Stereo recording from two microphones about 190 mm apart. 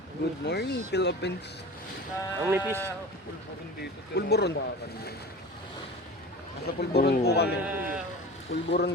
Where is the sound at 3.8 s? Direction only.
60° left (ahead or behind).